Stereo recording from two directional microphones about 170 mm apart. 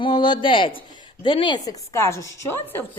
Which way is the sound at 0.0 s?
25° left (ahead or behind).